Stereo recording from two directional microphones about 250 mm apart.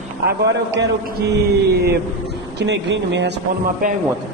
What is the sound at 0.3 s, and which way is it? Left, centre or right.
A man's voice, right.